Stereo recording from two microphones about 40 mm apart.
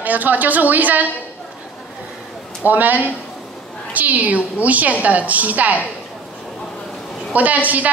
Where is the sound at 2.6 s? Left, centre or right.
Right.